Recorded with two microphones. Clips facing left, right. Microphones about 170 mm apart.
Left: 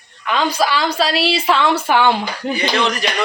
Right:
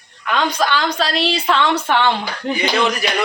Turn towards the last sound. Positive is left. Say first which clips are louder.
# right 1 dB
turn(degrees=-5)  # may be behind; listen again after turning